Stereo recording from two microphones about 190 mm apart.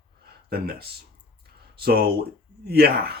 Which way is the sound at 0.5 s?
55° right (ahead or behind).